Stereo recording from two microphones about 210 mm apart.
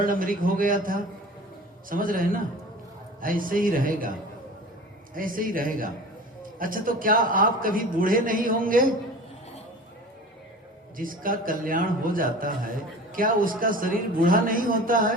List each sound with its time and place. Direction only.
0.0 s a man's voice: 40° right (ahead or behind)
5.1 s a man's voice: 40° right (ahead or behind)
10.9 s a man's voice: 40° right (ahead or behind)